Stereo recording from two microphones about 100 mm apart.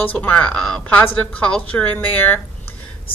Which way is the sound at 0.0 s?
15° left (ahead or behind).